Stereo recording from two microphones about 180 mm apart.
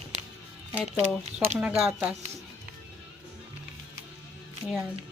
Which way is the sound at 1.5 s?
5° right (ahead or behind).